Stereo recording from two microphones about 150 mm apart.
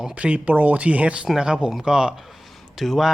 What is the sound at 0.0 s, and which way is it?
Speech, 10° right (ahead or behind).